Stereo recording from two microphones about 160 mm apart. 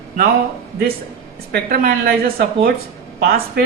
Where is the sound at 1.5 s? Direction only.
70° right (ahead or behind).